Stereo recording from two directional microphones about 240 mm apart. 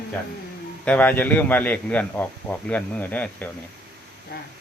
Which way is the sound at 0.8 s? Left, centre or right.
Centre.